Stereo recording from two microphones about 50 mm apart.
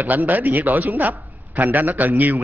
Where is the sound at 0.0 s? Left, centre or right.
Right.